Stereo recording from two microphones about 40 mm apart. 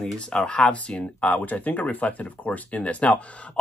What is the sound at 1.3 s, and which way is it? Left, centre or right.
Speech, left.